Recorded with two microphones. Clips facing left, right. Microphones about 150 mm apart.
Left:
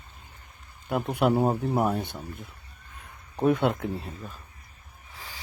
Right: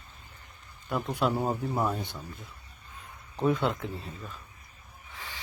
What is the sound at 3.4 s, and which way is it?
Speech, 60° left (ahead or behind).